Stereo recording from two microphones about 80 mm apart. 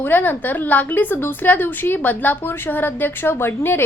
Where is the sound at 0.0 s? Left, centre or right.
Left.